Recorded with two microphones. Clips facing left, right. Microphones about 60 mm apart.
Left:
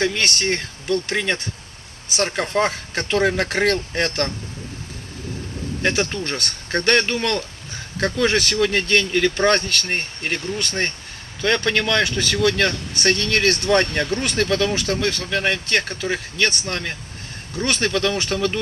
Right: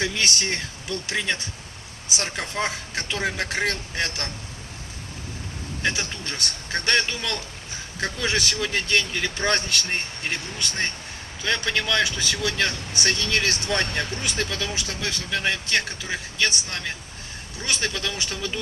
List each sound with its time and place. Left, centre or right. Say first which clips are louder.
0.0 s speech: left 4 dB; left
5.8 s speech: left 6 dB; left